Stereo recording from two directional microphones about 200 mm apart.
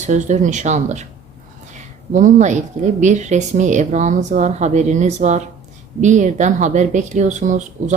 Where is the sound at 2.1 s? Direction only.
40° right (ahead or behind).